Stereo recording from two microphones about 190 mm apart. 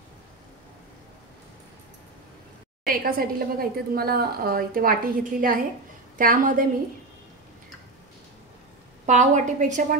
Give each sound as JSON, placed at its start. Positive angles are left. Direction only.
{"t": 2.9, "sound": "a woman's voice", "side_deg": -50}
{"t": 9.0, "sound": "a woman's voice", "side_deg": -40}